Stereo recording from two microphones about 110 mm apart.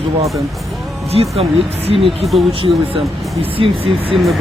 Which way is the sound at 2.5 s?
55° right (ahead or behind).